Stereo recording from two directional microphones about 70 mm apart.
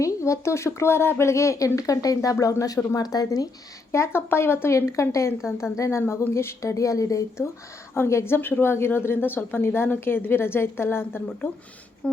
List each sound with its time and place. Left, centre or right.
0.0 s speech: left
3.9 s speech: left
12.0 s a sound: centre